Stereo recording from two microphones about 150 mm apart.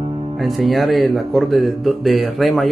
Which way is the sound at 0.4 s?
Centre (ahead or behind).